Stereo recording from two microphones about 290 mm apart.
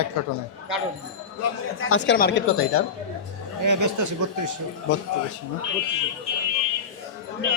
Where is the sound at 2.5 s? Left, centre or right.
Left.